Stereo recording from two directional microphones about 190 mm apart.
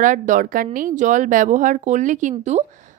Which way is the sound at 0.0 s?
45° right (ahead or behind).